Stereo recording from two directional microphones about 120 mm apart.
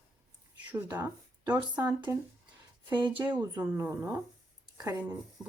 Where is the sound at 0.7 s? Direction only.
20° right (ahead or behind).